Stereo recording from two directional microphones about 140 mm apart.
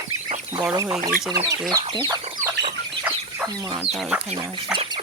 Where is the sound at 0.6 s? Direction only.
15° right (ahead or behind).